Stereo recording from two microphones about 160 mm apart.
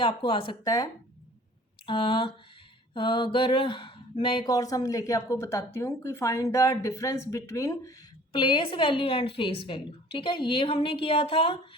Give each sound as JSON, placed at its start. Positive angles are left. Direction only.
{"t": 0.0, "sound": "speech", "side_deg": 35}
{"t": 1.9, "sound": "speech", "side_deg": 35}